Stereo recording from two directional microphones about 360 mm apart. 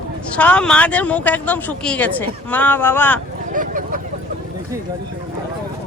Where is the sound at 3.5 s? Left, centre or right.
Right.